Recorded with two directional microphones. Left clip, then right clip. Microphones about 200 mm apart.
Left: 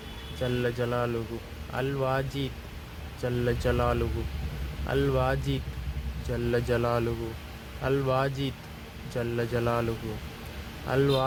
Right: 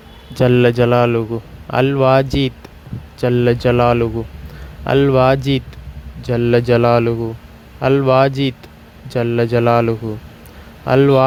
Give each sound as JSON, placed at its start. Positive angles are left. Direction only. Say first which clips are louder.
{"t": 0.3, "sound": "speech", "louder": "right 17 dB", "side_deg": -45}